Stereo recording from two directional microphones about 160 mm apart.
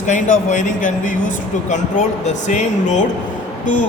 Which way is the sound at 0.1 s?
50° left (ahead or behind).